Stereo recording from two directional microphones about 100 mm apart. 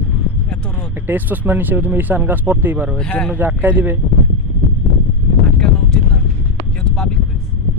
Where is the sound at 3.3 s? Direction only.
20° right (ahead or behind).